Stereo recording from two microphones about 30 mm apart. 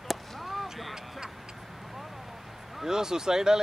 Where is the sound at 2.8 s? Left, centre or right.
Centre.